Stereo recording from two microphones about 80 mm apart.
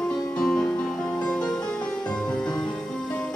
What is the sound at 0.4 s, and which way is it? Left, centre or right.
Music, centre.